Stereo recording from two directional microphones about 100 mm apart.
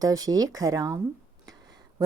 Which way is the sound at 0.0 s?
40° right (ahead or behind).